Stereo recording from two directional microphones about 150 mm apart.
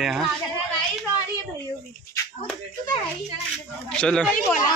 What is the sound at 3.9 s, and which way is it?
Speech, 5° left (ahead or behind).